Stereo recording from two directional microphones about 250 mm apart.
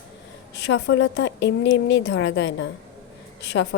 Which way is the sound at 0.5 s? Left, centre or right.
Left.